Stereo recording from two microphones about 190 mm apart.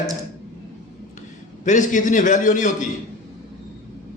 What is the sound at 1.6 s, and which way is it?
A man's voice, 40° left (ahead or behind).